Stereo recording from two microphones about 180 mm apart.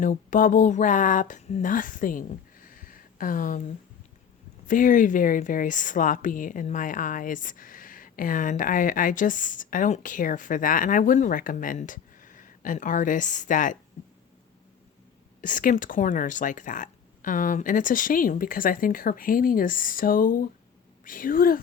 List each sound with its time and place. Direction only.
0.0 s speech: 45° left (ahead or behind)
4.6 s speech: 45° left (ahead or behind)
15.4 s speech: 45° left (ahead or behind)